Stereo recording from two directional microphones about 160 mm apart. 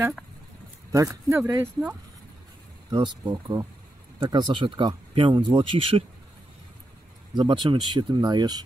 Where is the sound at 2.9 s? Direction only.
25° right (ahead or behind).